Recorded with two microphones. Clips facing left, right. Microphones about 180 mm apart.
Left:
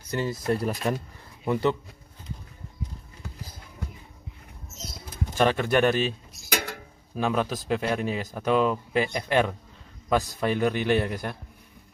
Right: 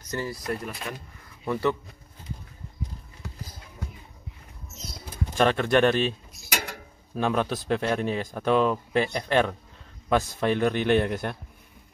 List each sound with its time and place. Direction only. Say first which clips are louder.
0.1 s speech: left 4 dB; 20° left (ahead or behind); by 0.9 s 35° left (ahead or behind)
1.4 s speech: left 1 dB; 20° left (ahead or behind)
5.4 s speech: right 1 dB; 10° left (ahead or behind)
7.2 s speech: right 1 dB; 5° left (ahead or behind)